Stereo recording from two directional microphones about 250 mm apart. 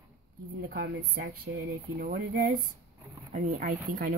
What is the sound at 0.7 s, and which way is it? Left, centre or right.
Speech, right.